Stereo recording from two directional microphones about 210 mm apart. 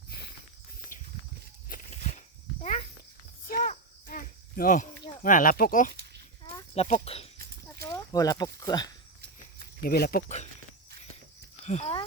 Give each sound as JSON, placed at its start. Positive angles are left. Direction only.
{"t": 1.7, "sound": "walk", "side_deg": 35}
{"t": 3.4, "sound": "a sound", "side_deg": 40}
{"t": 5.2, "sound": "speech", "side_deg": 40}
{"t": 5.9, "sound": "goat", "side_deg": -50}
{"t": 6.4, "sound": "a sound", "side_deg": 20}
{"t": 6.8, "sound": "speech", "side_deg": 30}
{"t": 7.8, "sound": "speech", "side_deg": 15}
{"t": 9.8, "sound": "speech", "side_deg": 45}
{"t": 11.6, "sound": "speech", "side_deg": 30}